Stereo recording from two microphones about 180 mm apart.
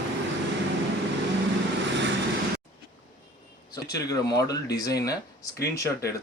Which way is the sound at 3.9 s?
20° left (ahead or behind).